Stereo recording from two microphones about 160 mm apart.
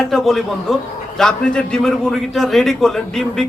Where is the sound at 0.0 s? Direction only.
Centre (ahead or behind).